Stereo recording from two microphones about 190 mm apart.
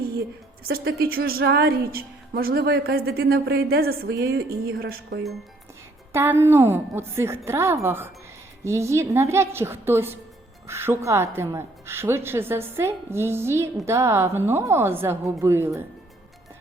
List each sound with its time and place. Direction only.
0.7 s a woman's voice: 55° right (ahead or behind)
6.1 s a woman's voice: 10° right (ahead or behind)